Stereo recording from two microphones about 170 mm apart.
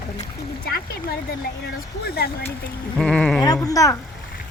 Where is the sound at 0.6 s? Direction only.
65° left (ahead or behind).